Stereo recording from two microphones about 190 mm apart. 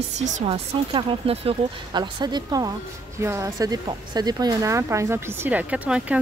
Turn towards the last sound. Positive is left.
turn(degrees=-5)  # may be behind; listen again after turning